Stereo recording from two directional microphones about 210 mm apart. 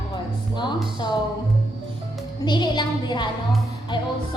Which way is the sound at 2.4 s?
20° left (ahead or behind).